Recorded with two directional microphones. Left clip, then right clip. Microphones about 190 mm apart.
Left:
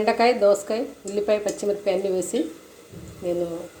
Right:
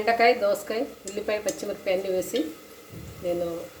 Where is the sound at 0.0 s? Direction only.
15° left (ahead or behind).